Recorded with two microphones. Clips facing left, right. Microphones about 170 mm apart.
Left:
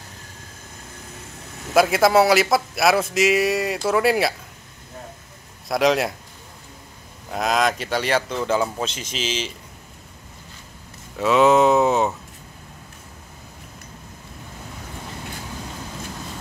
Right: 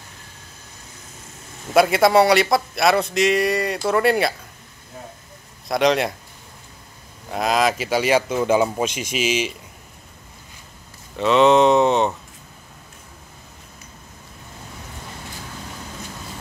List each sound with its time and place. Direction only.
1.7 s speech: centre (ahead or behind)
5.7 s speech: centre (ahead or behind)
7.2 s speech: centre (ahead or behind)
11.1 s speech: 5° left (ahead or behind)